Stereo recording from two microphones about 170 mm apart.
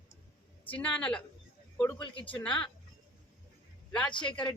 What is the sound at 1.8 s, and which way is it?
Speech, 15° left (ahead or behind).